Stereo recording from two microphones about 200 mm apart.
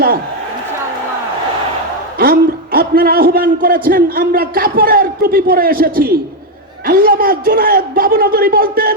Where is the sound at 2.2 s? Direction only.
50° right (ahead or behind).